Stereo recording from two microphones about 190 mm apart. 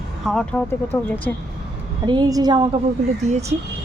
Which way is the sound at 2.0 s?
20° right (ahead or behind).